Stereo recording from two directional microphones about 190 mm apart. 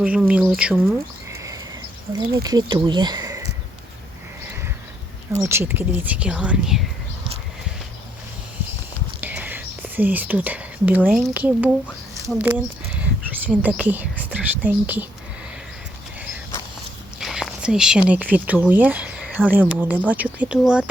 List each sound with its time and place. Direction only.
0.0 s a woman's voice: 5° right (ahead or behind)
0.6 s a sound: 10° right (ahead or behind)
2.1 s speech: 20° right (ahead or behind)
5.4 s a woman's voice: 15° right (ahead or behind)
9.2 s speech: 10° right (ahead or behind)
12.2 s a sound: 10° right (ahead or behind)
13.5 s a woman's voice: 10° right (ahead or behind)
17.2 s a sound: centre (ahead or behind)
18.1 s a woman's voice: 10° right (ahead or behind)